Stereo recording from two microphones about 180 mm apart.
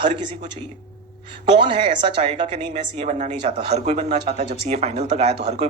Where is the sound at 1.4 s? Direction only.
25° right (ahead or behind).